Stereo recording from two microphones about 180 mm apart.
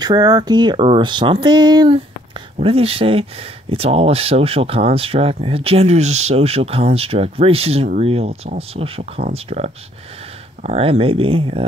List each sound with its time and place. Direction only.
0.0 s speech: 20° right (ahead or behind)